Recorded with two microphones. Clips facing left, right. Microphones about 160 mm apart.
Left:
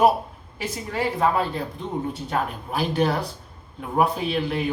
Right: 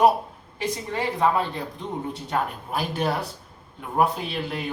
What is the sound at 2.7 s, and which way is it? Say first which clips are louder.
Speech: left 3 dB; centre (ahead or behind).